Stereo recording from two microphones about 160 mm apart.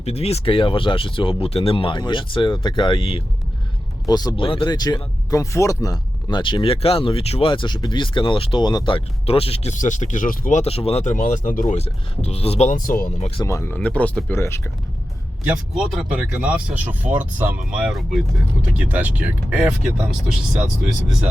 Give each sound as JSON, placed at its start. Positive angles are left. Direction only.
{"t": 0.0, "sound": "speech", "side_deg": 40}
{"t": 4.0, "sound": "speech", "side_deg": 25}
{"t": 9.7, "sound": "speech", "side_deg": 50}
{"t": 10.6, "sound": "speech", "side_deg": 40}
{"t": 11.8, "sound": "speech", "side_deg": 40}
{"t": 13.4, "sound": "speech", "side_deg": 15}
{"t": 15.4, "sound": "speech", "side_deg": -5}